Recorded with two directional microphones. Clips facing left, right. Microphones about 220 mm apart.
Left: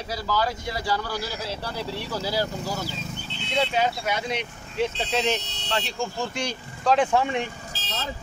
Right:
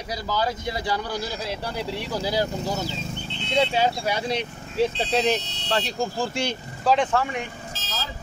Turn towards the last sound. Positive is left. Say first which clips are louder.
# left 3 dB
turn(degrees=25)  # may be behind; listen again after turning